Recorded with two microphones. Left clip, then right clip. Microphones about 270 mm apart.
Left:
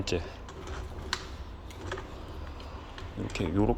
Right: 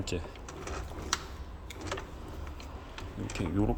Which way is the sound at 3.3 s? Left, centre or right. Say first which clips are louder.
Left 4 dB; centre.